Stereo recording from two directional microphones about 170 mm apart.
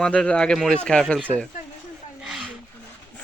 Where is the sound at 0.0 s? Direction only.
5° left (ahead or behind).